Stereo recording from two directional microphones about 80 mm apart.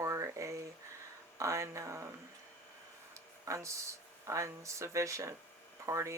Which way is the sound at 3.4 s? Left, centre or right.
Right.